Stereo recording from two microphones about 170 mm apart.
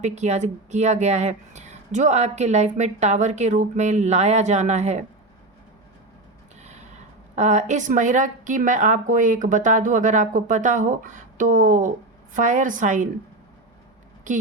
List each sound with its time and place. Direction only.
0.0 s speech: 45° right (ahead or behind)
6.6 s mechanisms: 40° right (ahead or behind)
7.3 s speech: 45° right (ahead or behind)